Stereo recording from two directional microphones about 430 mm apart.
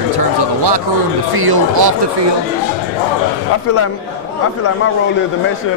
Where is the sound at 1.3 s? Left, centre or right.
Right.